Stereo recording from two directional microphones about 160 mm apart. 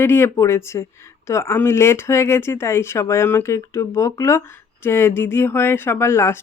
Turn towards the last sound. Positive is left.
turn(degrees=15)  # may be behind; listen again after turning